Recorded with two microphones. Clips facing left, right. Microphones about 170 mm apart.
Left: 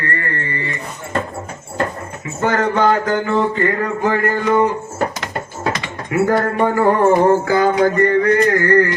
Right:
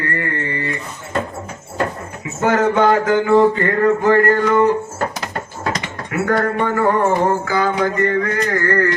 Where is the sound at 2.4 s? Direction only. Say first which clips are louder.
Right 2 dB; 5° right (ahead or behind).